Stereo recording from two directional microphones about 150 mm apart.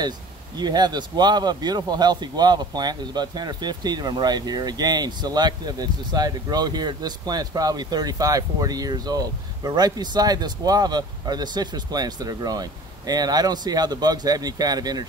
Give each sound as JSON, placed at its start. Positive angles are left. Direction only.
{"t": 0.6, "sound": "a man's voice", "side_deg": -30}